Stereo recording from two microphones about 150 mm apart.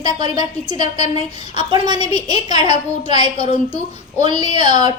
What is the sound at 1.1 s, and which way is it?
A woman's voice, 30° right (ahead or behind).